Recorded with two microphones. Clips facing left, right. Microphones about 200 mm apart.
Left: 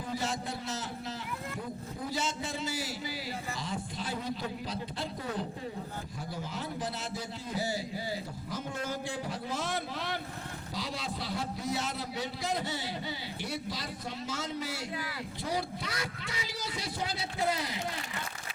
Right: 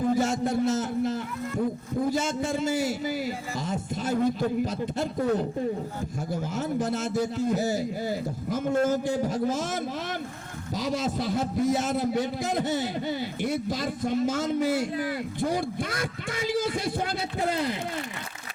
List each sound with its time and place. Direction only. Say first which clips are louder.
0.1 s a man's voice: right 11 dB; 50° right (ahead or behind)